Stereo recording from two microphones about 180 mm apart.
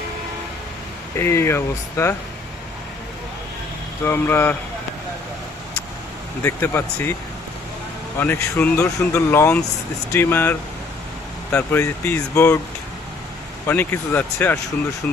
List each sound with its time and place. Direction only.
1.1 s speech: 15° left (ahead or behind)
4.0 s speech: 10° left (ahead or behind)
6.4 s speech: 10° left (ahead or behind)
8.2 s speech: 10° left (ahead or behind)
13.7 s speech: 10° left (ahead or behind)